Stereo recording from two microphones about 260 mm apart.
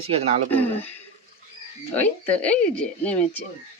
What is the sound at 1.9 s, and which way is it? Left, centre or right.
Speech, centre.